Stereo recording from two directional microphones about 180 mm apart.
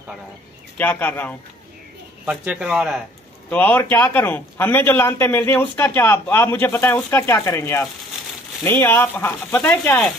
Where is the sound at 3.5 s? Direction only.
10° left (ahead or behind).